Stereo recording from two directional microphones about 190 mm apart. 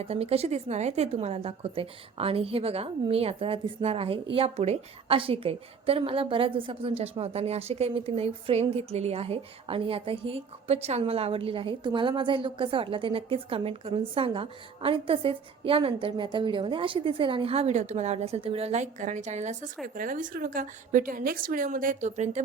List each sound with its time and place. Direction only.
0.0 s a woman's voice: 30° right (ahead or behind)